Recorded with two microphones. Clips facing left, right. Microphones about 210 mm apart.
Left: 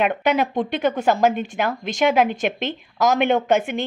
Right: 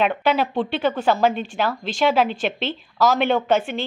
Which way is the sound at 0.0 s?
10° left (ahead or behind).